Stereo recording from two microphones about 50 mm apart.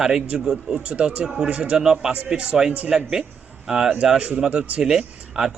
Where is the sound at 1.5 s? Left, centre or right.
Right.